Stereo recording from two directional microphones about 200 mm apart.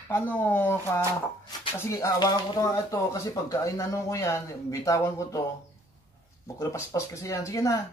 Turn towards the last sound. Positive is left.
turn(degrees=15)  # may be behind; listen again after turning